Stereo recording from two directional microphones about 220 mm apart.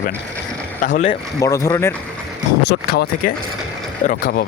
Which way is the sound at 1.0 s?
15° left (ahead or behind).